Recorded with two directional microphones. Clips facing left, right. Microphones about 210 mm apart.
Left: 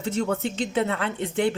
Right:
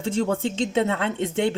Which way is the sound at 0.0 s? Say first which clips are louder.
Right 2 dB; 30° right (ahead or behind).